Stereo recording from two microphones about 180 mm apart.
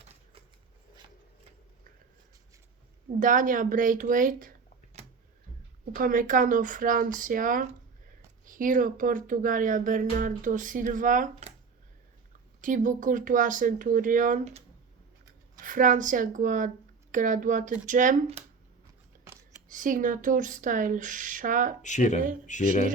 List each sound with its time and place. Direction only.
3.2 s speech: 45° right (ahead or behind)
5.9 s speech: 50° right (ahead or behind)
12.6 s speech: 45° right (ahead or behind)
15.6 s speech: 50° right (ahead or behind)
19.6 s speech: 45° right (ahead or behind)
21.8 s speech: 40° left (ahead or behind)